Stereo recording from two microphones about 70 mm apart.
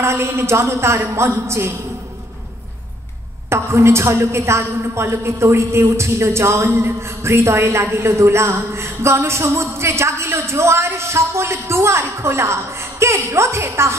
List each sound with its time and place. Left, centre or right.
0.0 s a woman's voice: right
3.4 s a woman's voice: right